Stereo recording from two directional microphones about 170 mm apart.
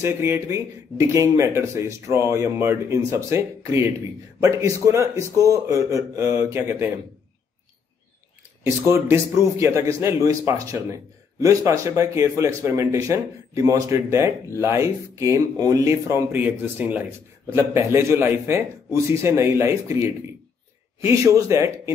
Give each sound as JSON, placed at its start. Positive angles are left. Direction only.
{"t": 0.0, "sound": "speech", "side_deg": -15}
{"t": 8.6, "sound": "speech", "side_deg": -15}